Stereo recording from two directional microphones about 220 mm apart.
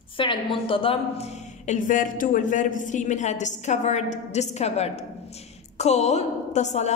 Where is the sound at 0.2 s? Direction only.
25° left (ahead or behind).